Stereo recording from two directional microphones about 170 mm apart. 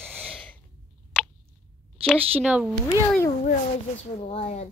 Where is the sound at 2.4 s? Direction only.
Centre (ahead or behind).